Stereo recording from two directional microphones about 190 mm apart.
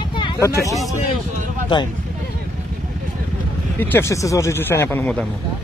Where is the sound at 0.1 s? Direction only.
25° left (ahead or behind).